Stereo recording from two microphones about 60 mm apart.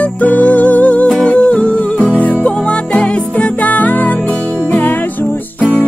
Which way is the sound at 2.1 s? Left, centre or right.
Left.